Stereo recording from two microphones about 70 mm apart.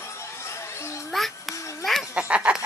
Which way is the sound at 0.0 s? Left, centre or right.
Left.